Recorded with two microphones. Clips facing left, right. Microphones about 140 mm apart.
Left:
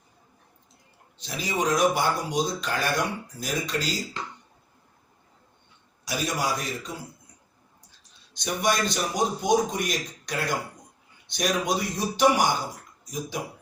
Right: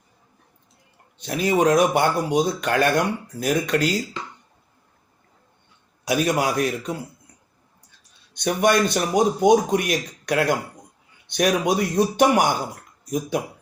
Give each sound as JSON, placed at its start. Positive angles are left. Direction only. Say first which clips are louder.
{"t": 1.2, "sound": "speech", "louder": "right 8 dB", "side_deg": -55}
{"t": 6.1, "sound": "speech", "louder": "right 7 dB", "side_deg": -60}
{"t": 8.4, "sound": "speech", "louder": "right 7 dB", "side_deg": -60}